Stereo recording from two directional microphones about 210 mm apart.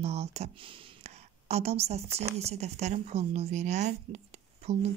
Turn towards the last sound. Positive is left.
turn(degrees=-30)  # may be behind; listen again after turning